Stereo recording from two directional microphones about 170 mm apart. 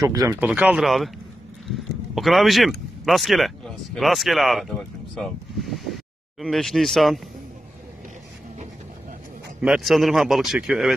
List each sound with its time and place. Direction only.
0.0 s speech: 20° right (ahead or behind)
0.4 s speech: 5° right (ahead or behind)
2.1 s speech: centre (ahead or behind)
9.6 s speech: 5° right (ahead or behind)